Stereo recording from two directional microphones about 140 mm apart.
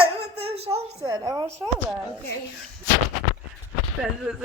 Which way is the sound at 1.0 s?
25° right (ahead or behind).